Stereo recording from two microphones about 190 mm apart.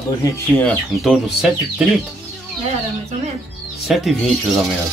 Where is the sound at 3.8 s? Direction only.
Centre (ahead or behind).